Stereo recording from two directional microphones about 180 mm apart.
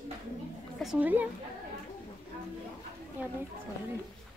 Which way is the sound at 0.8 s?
5° right (ahead or behind).